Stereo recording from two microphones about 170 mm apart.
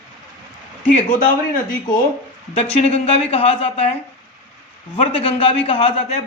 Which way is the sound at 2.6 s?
35° left (ahead or behind).